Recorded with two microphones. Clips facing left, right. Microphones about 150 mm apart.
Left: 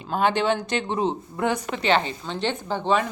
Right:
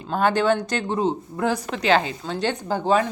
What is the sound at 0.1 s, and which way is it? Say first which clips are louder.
Speech: right 2 dB; 45° right (ahead or behind).